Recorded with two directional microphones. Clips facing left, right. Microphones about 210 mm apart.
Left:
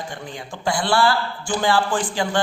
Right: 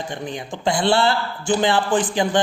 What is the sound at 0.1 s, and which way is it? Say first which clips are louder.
A man's voice: right 5 dB; 20° right (ahead or behind).